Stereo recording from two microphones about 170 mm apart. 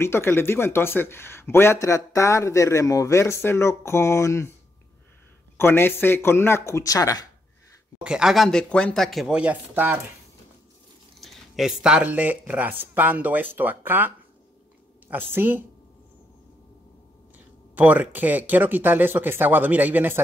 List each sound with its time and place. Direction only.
0.0 s a man's voice: 15° left (ahead or behind)
5.6 s a man's voice: 15° left (ahead or behind)
8.0 s speech: 5° right (ahead or behind)
11.1 s speech: centre (ahead or behind)
17.7 s speech: 10° right (ahead or behind)